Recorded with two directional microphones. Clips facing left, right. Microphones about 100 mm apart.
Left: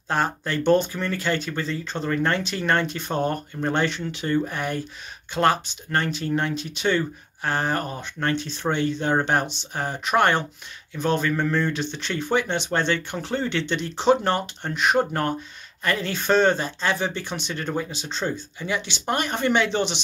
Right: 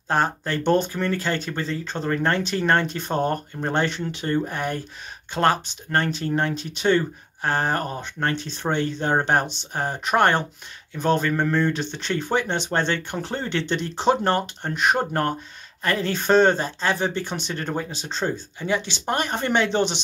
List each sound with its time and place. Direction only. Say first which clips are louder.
0.1 s speech: right 2 dB; 35° right (ahead or behind)